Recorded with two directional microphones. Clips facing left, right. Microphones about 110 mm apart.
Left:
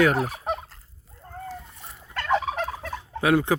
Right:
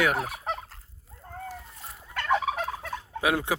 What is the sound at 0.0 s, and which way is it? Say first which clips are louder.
Fowl: left 5 dB; 5° right (ahead or behind).